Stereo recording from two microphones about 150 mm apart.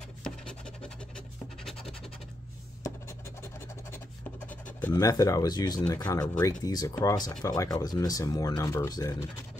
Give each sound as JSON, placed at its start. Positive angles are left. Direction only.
{"t": 0.2, "sound": "scratch", "side_deg": 5}
{"t": 4.9, "sound": "speech", "side_deg": 25}